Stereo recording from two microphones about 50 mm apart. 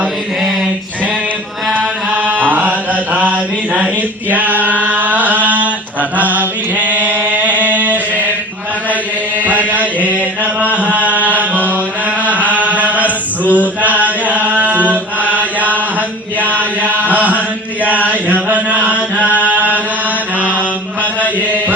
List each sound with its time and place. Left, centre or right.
2.1 s mantra: right
7.3 s a sound: right
9.4 s chant: right
18.4 s chant: right